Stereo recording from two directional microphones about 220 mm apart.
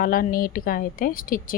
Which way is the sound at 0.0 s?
40° left (ahead or behind).